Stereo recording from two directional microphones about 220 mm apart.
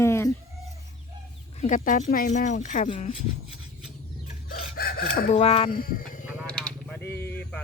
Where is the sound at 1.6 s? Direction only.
35° left (ahead or behind).